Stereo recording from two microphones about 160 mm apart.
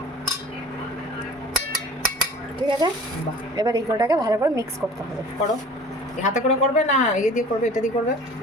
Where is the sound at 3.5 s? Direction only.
20° right (ahead or behind).